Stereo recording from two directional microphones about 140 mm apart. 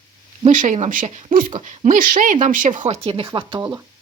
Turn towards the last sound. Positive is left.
turn(degrees=-35)  # may be behind; listen again after turning